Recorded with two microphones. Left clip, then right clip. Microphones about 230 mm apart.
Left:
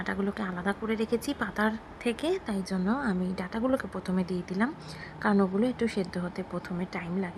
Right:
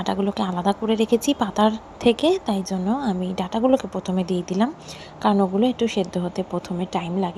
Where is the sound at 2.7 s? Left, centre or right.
Centre.